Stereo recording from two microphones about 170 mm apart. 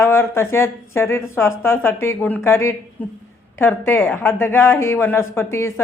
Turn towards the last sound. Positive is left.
turn(degrees=15)  # may be behind; listen again after turning